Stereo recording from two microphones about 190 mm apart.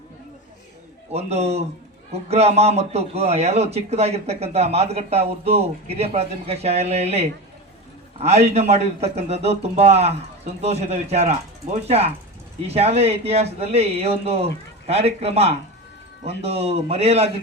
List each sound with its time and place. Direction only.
1.1 s a man's voice: 35° right (ahead or behind)